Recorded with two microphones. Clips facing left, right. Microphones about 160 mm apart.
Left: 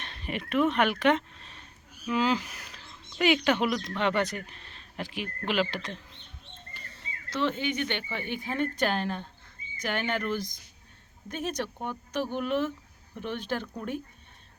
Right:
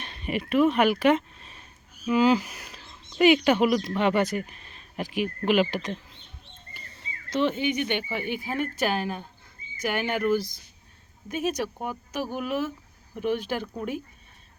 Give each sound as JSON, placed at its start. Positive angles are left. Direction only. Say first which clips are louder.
{"t": 0.0, "sound": "speech", "louder": "right 5 dB", "side_deg": 0}
{"t": 7.3, "sound": "speech", "louder": "right 4 dB", "side_deg": -15}